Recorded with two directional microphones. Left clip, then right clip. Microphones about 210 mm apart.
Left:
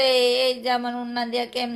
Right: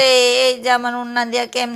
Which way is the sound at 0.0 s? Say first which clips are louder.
Right 6 dB; 30° right (ahead or behind).